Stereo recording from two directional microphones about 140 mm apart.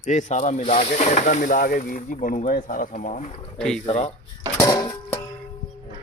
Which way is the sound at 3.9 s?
50° left (ahead or behind).